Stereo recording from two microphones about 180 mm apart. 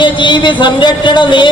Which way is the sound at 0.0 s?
25° left (ahead or behind).